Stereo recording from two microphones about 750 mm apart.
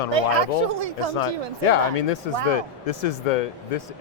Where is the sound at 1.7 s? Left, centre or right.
Left.